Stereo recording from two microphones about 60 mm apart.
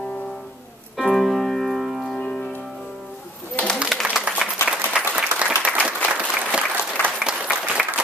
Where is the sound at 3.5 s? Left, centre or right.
Centre.